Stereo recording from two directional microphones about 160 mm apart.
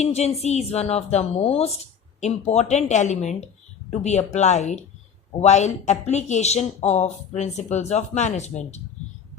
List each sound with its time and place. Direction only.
0.0 s a woman's voice: 40° left (ahead or behind)